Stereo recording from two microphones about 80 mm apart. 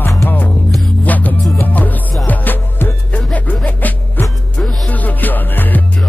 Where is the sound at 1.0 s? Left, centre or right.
Centre.